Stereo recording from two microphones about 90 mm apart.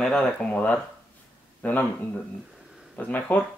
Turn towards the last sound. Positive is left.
turn(degrees=20)  # may be behind; listen again after turning